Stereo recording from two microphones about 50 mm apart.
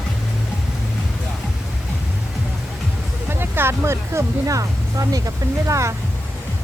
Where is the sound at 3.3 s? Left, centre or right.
Right.